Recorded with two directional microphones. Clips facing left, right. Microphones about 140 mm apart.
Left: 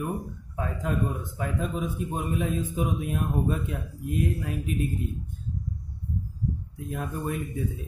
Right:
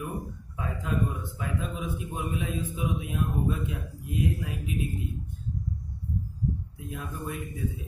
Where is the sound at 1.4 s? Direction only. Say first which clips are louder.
Left 5 dB; 45° left (ahead or behind).